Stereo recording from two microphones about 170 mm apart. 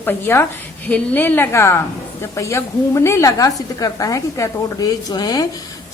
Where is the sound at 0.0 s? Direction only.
15° left (ahead or behind).